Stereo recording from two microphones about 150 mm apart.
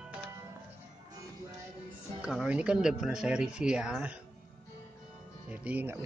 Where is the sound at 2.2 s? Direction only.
5° right (ahead or behind).